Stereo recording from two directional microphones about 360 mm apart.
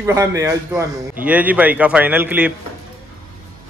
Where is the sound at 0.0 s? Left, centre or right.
Centre.